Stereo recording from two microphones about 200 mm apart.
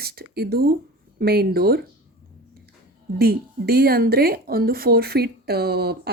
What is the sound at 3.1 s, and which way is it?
Speech, 50° right (ahead or behind).